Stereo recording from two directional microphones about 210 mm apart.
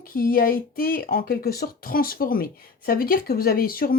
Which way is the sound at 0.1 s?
45° left (ahead or behind).